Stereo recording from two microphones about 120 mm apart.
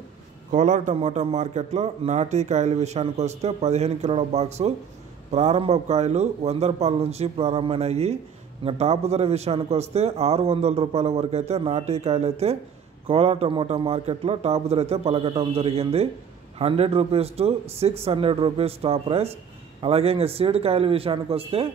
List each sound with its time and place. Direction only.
0.5 s a man's voice: 90° right; by 21.6 s 50° right (ahead or behind)